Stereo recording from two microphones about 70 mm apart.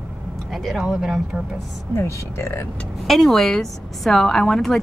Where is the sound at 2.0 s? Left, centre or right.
Left.